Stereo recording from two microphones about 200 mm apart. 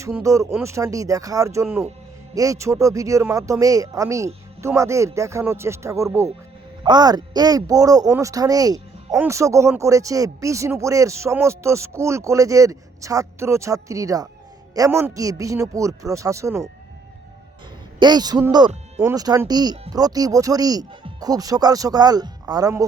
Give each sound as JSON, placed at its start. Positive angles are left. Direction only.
{"t": 0.0, "sound": "speech", "side_deg": -15}
{"t": 18.0, "sound": "speech", "side_deg": -20}